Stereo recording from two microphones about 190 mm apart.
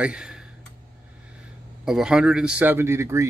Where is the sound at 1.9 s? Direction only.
5° right (ahead or behind).